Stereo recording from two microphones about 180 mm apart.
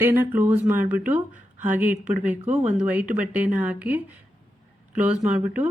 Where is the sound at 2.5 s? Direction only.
40° right (ahead or behind).